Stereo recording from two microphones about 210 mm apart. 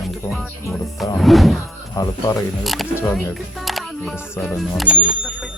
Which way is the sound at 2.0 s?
15° left (ahead or behind).